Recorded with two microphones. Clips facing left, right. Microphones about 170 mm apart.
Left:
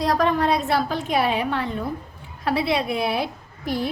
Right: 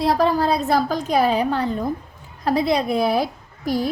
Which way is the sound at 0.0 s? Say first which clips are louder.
Right 2 dB; 30° right (ahead or behind).